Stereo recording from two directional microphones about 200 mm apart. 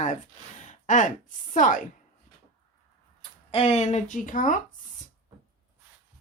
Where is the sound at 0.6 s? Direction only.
40° left (ahead or behind).